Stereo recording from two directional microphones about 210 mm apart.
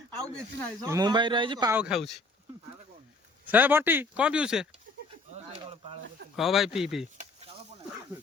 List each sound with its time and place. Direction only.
0.9 s speech: 20° right (ahead or behind)
1.8 s speech: centre (ahead or behind)
3.4 s speech: 10° right (ahead or behind)
6.3 s speech: centre (ahead or behind)